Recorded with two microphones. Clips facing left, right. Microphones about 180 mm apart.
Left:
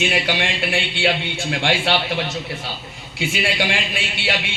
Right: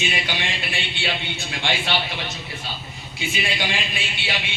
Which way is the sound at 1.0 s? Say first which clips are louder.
Left 8 dB; 65° left (ahead or behind).